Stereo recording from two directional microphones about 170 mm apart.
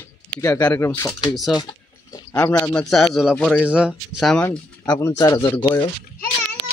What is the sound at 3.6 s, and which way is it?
Speech, 5° right (ahead or behind).